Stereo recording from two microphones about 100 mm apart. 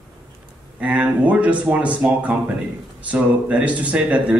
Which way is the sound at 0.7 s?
15° right (ahead or behind).